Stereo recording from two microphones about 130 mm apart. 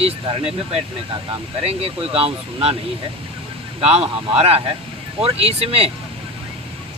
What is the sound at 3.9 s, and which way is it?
Speech, 50° right (ahead or behind).